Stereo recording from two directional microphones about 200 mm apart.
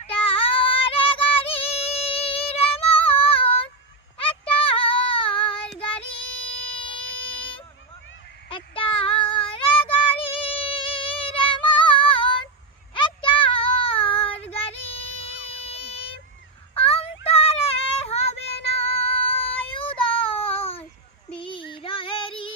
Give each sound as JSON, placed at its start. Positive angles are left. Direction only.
{"t": 0.0, "sound": "child singing", "side_deg": 30}
{"t": 8.4, "sound": "child singing", "side_deg": 25}
{"t": 15.6, "sound": "a sound", "side_deg": 30}
{"t": 16.7, "sound": "child singing", "side_deg": 30}